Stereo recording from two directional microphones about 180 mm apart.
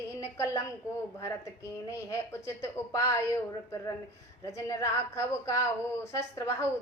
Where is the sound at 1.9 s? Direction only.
15° left (ahead or behind).